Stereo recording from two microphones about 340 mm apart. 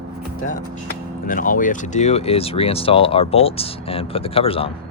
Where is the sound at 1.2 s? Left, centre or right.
Left.